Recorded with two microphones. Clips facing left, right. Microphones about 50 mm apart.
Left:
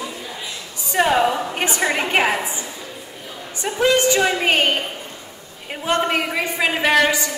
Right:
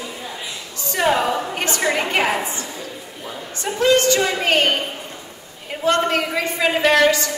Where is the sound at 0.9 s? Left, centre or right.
Centre.